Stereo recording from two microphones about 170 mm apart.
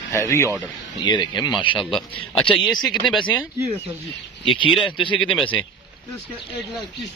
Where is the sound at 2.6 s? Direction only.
Centre (ahead or behind).